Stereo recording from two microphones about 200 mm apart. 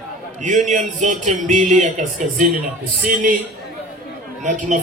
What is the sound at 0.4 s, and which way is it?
A man's voice, 40° right (ahead or behind).